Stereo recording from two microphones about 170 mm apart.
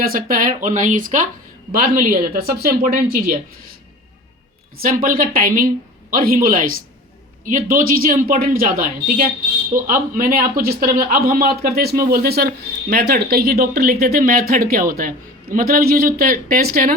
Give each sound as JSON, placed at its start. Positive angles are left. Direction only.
{"t": 0.0, "sound": "speech", "side_deg": -55}
{"t": 4.8, "sound": "speech", "side_deg": -55}